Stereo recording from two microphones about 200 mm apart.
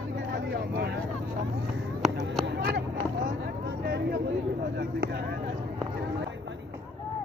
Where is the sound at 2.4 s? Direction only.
60° right (ahead or behind).